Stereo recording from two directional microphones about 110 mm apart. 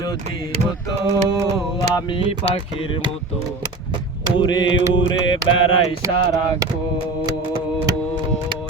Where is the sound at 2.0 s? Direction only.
50° left (ahead or behind).